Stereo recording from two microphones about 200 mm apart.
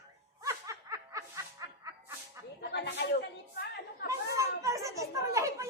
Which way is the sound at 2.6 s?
55° left (ahead or behind).